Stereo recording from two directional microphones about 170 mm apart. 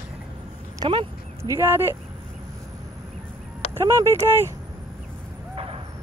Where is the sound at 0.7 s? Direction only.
30° right (ahead or behind).